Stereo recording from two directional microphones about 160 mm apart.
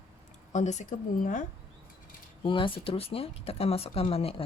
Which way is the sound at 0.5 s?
45° left (ahead or behind).